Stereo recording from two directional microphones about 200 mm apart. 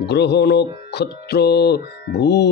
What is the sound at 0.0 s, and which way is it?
Speech, 55° left (ahead or behind).